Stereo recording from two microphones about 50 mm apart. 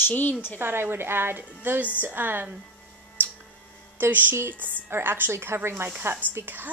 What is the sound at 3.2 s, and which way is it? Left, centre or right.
Tick-tock, right.